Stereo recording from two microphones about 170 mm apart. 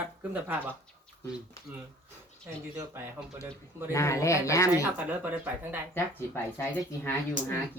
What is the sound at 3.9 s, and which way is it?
Speech, 15° left (ahead or behind).